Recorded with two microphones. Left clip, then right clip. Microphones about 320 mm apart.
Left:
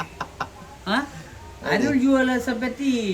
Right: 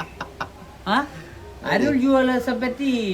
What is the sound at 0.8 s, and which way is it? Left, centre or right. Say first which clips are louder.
A woman's voice: right 3 dB; centre.